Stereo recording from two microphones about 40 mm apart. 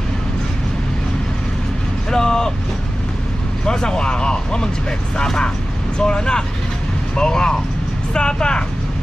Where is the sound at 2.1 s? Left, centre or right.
Centre.